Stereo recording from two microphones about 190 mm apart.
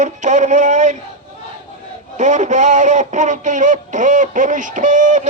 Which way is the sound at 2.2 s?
40° right (ahead or behind).